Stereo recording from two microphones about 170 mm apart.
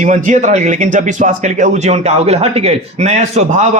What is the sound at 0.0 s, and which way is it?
Speech, 45° right (ahead or behind).